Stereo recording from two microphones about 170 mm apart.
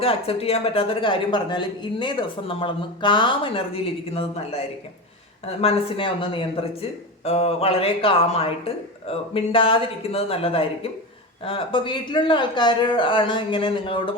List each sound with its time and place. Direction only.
0.0 s a woman's voice: 35° left (ahead or behind)